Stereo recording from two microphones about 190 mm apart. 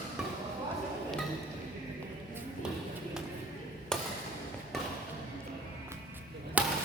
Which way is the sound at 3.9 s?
5° left (ahead or behind).